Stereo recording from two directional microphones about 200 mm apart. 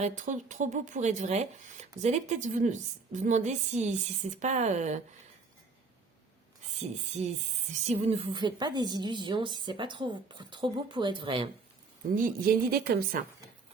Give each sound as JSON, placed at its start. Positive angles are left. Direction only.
{"t": 0.0, "sound": "speech", "side_deg": -40}
{"t": 7.7, "sound": "a woman's voice", "side_deg": -30}
{"t": 12.1, "sound": "a woman's voice", "side_deg": -45}